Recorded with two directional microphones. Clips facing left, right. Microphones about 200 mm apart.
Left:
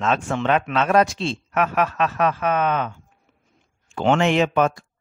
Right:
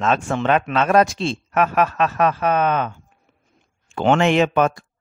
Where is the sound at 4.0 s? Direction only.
60° right (ahead or behind).